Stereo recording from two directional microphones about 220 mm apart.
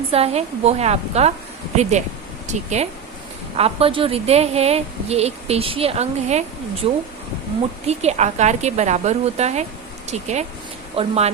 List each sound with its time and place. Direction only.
0.1 s a woman's voice: 25° right (ahead or behind)
7.9 s a woman's voice: 30° right (ahead or behind)